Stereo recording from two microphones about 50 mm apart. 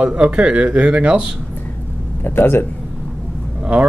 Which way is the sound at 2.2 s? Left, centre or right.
Left.